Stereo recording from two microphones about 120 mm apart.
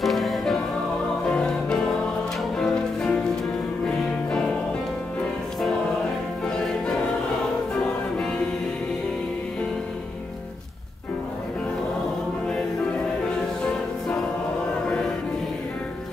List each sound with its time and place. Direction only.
0.0 s music: centre (ahead or behind)